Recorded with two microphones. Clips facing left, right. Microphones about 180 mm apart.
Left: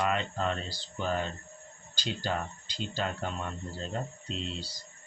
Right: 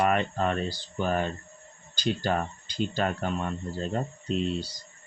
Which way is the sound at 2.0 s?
60° right (ahead or behind).